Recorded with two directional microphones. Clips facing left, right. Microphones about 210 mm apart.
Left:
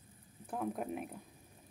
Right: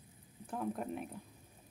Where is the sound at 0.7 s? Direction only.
5° left (ahead or behind).